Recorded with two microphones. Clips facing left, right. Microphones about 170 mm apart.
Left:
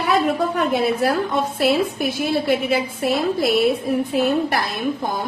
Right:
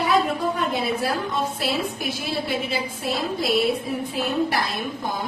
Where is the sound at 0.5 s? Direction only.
65° left (ahead or behind).